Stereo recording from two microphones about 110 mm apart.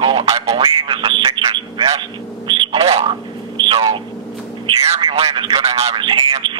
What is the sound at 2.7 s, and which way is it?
Speech, 65° right (ahead or behind).